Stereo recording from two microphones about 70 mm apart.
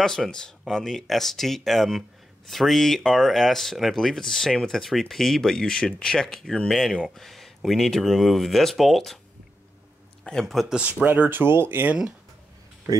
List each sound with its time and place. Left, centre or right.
0.0 s speech: centre
10.2 s speech: centre
10.9 s speech: right